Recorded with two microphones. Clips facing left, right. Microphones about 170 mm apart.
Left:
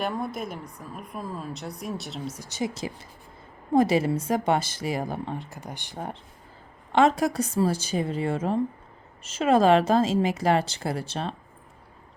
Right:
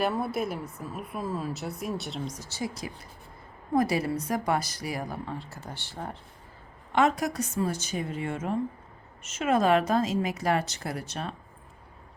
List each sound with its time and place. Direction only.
0.0 s a woman's voice: 5° right (ahead or behind); by 6.1 s 15° left (ahead or behind)
6.9 s a woman's voice: 30° left (ahead or behind)